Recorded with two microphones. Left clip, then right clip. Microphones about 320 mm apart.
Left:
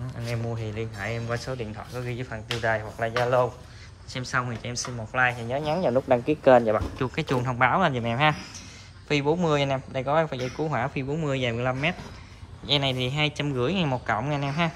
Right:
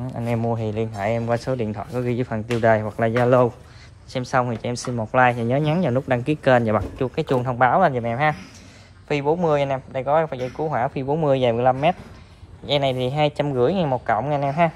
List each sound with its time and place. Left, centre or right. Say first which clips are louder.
0.3 s speech: right 9 dB; centre
4.1 s speech: right 7 dB; centre
6.0 s speech: left 1 dB; right
7.0 s speech: right 5 dB; centre